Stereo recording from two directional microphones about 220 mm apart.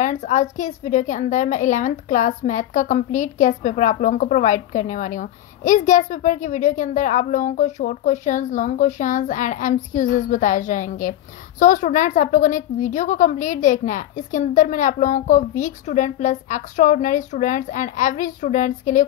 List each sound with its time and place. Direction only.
0.0 s a woman's voice: 30° left (ahead or behind)